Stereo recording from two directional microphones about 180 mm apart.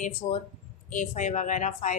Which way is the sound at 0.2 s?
35° left (ahead or behind).